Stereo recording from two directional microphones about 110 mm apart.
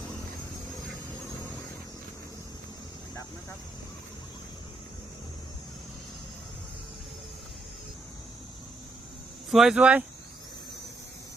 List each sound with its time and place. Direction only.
9.5 s speech: 5° right (ahead or behind)